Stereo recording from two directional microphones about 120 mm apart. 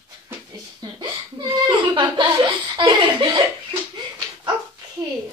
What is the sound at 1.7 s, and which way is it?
Laughter, 40° right (ahead or behind).